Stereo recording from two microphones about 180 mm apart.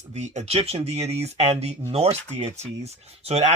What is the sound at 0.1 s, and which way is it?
Speech, 40° right (ahead or behind).